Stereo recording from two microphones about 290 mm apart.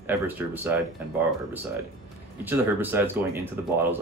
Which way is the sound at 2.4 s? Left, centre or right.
Centre.